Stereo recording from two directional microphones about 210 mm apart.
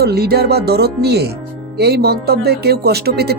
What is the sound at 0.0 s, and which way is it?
Speech, 50° right (ahead or behind).